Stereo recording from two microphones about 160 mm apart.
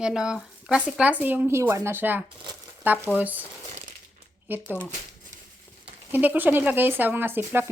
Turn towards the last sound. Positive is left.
turn(degrees=-15)  # may be behind; listen again after turning